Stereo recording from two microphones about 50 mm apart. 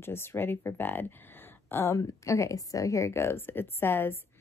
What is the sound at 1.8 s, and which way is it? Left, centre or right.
Speech, left.